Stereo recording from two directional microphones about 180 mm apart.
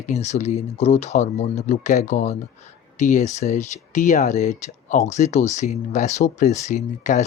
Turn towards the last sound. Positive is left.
turn(degrees=40)  # may be behind; listen again after turning